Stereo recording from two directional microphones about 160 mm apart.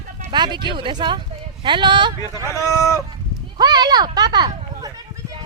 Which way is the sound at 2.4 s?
20° left (ahead or behind).